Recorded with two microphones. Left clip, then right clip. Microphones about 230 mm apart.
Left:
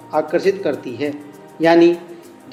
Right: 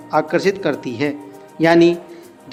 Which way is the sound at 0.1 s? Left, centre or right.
Right.